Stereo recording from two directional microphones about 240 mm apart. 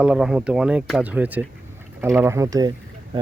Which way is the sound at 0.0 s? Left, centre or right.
Centre.